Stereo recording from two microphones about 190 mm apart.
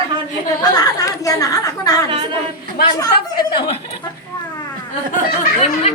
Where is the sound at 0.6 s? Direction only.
20° left (ahead or behind).